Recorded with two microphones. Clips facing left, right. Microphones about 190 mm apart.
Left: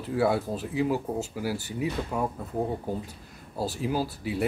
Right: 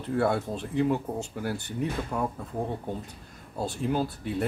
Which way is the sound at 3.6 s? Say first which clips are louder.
Even; 5° left (ahead or behind).